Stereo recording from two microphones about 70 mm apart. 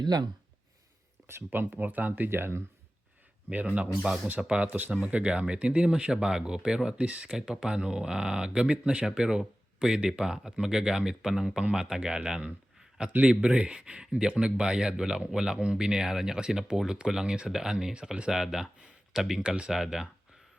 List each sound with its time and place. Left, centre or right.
0.0 s speech: right
1.5 s speech: right
3.5 s speech: right
4.4 s speech: centre
4.6 s speech: right; by 20.1 s centre